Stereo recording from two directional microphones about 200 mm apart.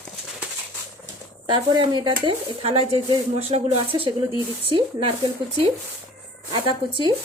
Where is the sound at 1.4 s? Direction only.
25° right (ahead or behind).